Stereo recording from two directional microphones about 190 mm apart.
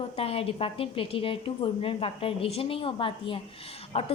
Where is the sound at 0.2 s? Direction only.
30° left (ahead or behind).